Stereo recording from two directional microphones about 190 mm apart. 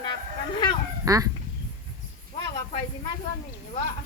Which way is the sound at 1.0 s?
15° right (ahead or behind).